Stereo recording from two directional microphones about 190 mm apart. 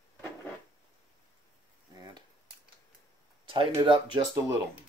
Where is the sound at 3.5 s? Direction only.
25° right (ahead or behind).